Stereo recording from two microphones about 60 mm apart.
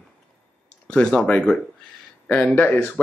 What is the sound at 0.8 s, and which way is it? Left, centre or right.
Speech, centre.